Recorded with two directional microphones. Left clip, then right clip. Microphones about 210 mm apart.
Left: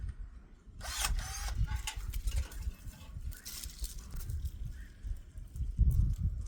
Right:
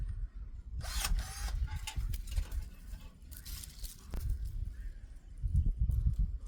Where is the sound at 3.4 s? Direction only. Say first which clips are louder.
Left 4 dB; 15° left (ahead or behind).